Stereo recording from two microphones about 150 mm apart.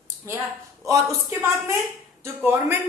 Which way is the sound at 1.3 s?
20° right (ahead or behind).